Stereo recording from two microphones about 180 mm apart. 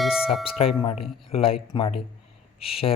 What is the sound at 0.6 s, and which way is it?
Speech, 35° left (ahead or behind).